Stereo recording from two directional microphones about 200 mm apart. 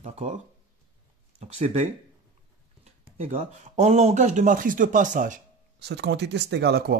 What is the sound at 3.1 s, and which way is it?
Speech, 35° right (ahead or behind).